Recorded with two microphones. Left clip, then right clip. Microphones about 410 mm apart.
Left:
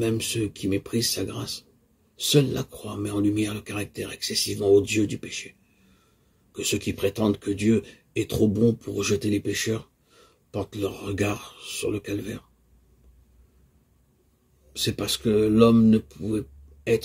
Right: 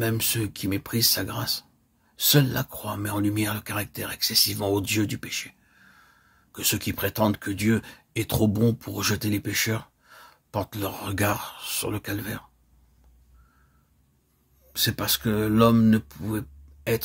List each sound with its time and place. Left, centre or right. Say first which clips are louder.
0.0 s speech: left 1 dB; right
14.7 s speech: right 1 dB; right